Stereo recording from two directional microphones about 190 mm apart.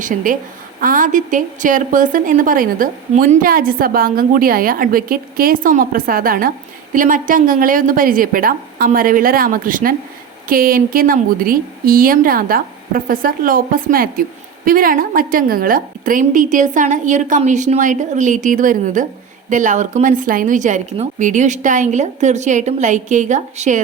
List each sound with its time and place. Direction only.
0.0 s a woman's voice: 45° right (ahead or behind)